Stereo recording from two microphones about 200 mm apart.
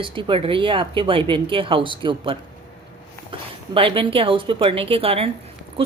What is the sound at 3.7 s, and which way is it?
Speech, 25° right (ahead or behind).